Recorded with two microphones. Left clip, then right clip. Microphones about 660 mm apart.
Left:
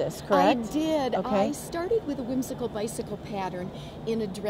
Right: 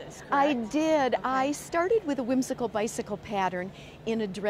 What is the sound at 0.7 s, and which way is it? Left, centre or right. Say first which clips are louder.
A woman's voice: right 1 dB; right.